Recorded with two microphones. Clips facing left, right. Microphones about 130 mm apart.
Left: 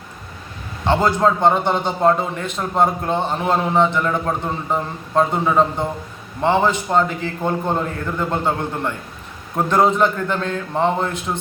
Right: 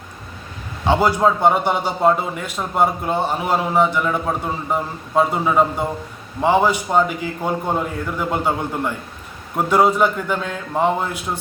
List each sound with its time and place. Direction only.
0.9 s a man's voice: 10° right (ahead or behind)